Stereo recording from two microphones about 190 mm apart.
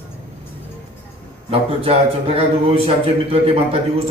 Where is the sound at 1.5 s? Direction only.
30° right (ahead or behind).